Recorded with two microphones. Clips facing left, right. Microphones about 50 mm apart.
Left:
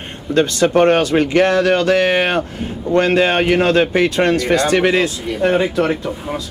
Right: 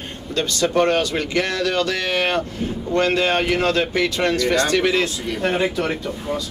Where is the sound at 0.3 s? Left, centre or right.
Left.